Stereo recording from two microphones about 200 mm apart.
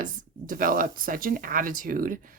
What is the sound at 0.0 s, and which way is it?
A woman's voice, 45° right (ahead or behind).